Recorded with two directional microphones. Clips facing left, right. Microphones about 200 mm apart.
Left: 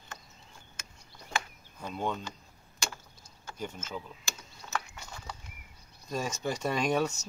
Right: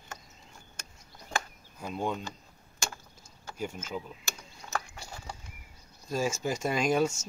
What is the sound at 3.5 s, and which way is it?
Speech, 10° right (ahead or behind).